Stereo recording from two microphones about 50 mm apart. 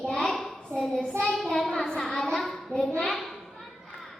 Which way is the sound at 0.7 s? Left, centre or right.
Centre.